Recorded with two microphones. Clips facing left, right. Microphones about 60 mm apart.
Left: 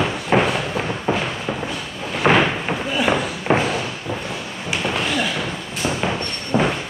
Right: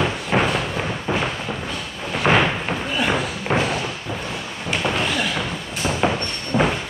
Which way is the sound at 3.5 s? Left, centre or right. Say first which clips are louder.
Left 3 dB; centre.